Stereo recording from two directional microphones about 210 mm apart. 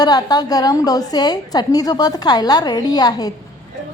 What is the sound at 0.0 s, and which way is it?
A woman's voice, 20° left (ahead or behind).